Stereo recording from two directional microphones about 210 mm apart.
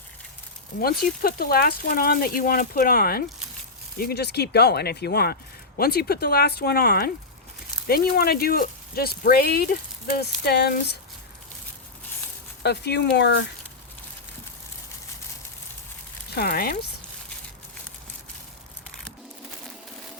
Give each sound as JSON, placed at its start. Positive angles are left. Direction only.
{"t": 0.8, "sound": "speech", "side_deg": 45}
{"t": 12.6, "sound": "speech", "side_deg": 50}
{"t": 16.3, "sound": "speech", "side_deg": 45}